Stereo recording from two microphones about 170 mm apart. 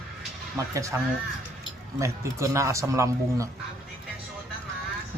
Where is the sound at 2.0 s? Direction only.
15° right (ahead or behind).